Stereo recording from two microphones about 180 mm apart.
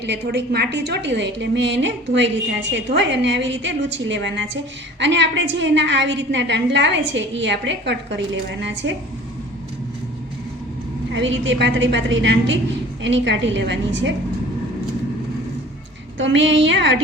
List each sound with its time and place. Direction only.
0.0 s a woman's voice: 70° right (ahead or behind); by 9.0 s 90° right
11.1 s a woman's voice: 90° right
16.1 s a woman's voice: 90° right